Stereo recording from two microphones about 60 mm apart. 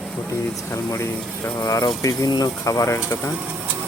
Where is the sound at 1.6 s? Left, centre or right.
Left.